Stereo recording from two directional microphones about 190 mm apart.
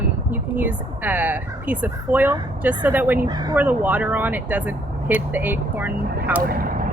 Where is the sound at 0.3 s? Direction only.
10° right (ahead or behind).